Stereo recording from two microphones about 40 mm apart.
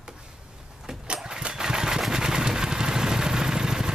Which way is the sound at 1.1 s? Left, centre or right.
Centre.